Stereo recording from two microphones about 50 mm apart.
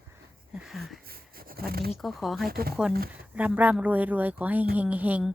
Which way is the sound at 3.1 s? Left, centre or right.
Right.